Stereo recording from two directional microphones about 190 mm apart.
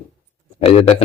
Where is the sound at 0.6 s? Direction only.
30° left (ahead or behind).